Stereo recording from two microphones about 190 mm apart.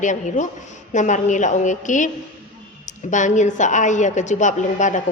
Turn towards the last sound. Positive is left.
turn(degrees=40)  # may be behind; listen again after turning